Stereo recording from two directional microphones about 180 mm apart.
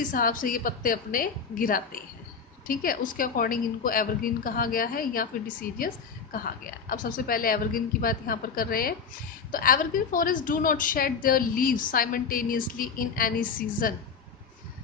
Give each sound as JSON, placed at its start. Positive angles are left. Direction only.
{"t": 0.0, "sound": "a woman's voice", "side_deg": 50}